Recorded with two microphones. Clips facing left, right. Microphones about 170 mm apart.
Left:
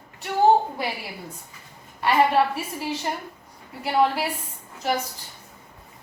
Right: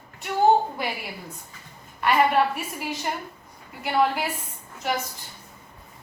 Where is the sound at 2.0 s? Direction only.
30° left (ahead or behind).